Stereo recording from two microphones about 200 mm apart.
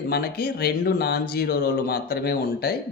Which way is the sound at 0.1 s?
50° left (ahead or behind).